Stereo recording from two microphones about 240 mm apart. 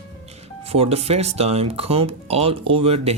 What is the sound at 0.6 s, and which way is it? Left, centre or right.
Speech, right.